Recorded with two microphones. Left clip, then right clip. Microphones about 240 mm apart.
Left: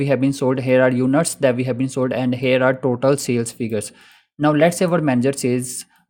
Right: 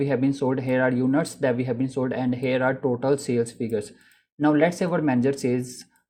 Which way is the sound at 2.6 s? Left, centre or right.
Left.